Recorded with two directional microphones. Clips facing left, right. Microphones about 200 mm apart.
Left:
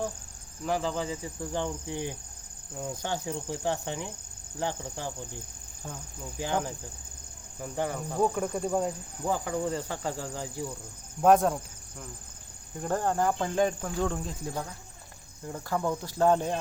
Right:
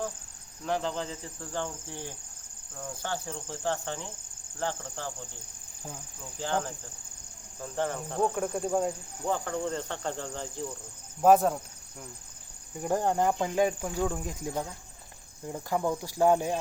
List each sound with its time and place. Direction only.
0.6 s speech: 5° left (ahead or behind)
6.4 s speech: 10° left (ahead or behind)
11.2 s insect: 5° right (ahead or behind)
12.8 s cricket: 15° right (ahead or behind)